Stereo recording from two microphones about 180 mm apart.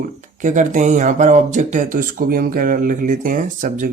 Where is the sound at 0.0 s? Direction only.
45° right (ahead or behind).